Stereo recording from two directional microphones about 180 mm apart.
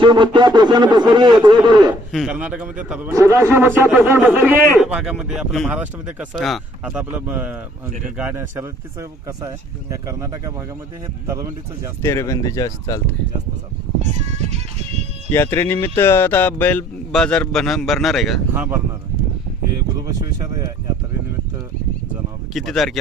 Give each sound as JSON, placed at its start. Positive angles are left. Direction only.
{"t": 0.0, "sound": "speech", "side_deg": -25}
{"t": 2.1, "sound": "a man's voice", "side_deg": -5}
{"t": 12.0, "sound": "speech", "side_deg": 15}
{"t": 14.0, "sound": "music", "side_deg": -40}
{"t": 15.3, "sound": "speech", "side_deg": 15}
{"t": 22.5, "sound": "speech", "side_deg": 0}